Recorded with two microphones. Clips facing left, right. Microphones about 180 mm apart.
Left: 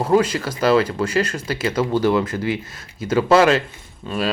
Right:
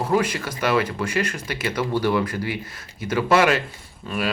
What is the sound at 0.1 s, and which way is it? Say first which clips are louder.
Speech: left 6 dB; 25° left (ahead or behind).